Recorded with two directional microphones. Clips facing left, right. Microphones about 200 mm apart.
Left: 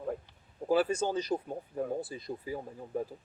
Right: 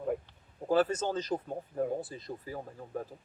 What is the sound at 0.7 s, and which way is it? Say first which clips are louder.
Speech: even; 10° left (ahead or behind).